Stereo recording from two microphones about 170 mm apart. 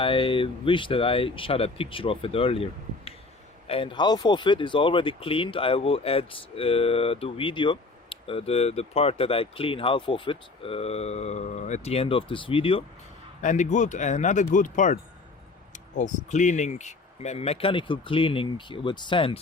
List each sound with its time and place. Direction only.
0.0 s speech: 30° left (ahead or behind)
13.4 s speech: 45° left (ahead or behind)